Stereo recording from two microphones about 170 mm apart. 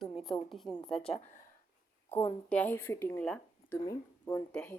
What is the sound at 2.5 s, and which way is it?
A woman's voice, 10° left (ahead or behind).